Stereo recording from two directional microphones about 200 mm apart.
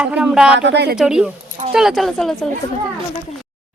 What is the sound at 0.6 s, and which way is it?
Speech, 60° right (ahead or behind).